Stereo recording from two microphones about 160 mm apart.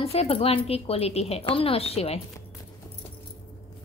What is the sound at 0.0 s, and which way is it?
Speech, 40° left (ahead or behind).